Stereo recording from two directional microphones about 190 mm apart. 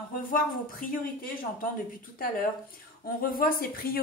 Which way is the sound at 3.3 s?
50° left (ahead or behind).